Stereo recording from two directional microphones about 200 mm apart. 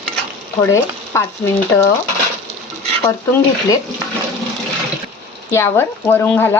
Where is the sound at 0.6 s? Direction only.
15° left (ahead or behind).